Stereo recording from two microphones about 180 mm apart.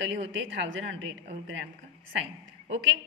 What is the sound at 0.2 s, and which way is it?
Speech, 85° right.